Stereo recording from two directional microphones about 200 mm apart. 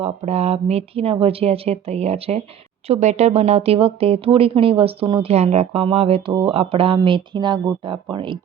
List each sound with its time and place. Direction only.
0.0 s speech: 30° right (ahead or behind)